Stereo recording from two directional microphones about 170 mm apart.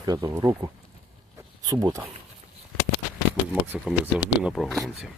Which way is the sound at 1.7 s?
20° right (ahead or behind).